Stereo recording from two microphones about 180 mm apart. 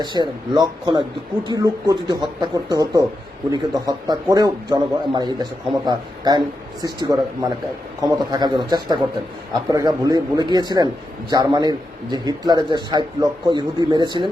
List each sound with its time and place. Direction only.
0.0 s a man's voice: 25° right (ahead or behind)